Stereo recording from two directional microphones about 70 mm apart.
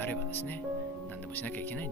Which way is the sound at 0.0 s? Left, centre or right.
Left.